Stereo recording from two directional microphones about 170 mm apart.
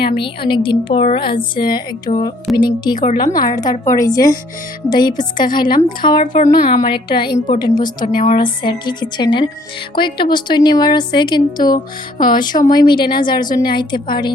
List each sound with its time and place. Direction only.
0.2 s a woman's voice: 30° left (ahead or behind)
2.1 s speech: 45° left (ahead or behind)
2.6 s a woman's voice: 25° left (ahead or behind)
6.3 s speech: 50° left (ahead or behind)
6.8 s a woman's voice: 30° left (ahead or behind)
7.3 s speech: 45° left (ahead or behind)
7.6 s a woman's voice: 25° left (ahead or behind)
8.0 s speech: 50° left (ahead or behind)
8.4 s a woman's voice: 30° left (ahead or behind)
12.1 s speech: 55° left (ahead or behind)
12.6 s a woman's voice: 25° left (ahead or behind)